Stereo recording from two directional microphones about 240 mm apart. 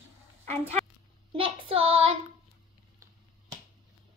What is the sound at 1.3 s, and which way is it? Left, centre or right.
Child singing, right.